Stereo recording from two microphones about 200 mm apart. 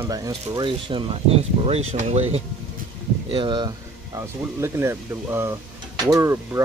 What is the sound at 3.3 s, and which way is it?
Speech, 20° right (ahead or behind).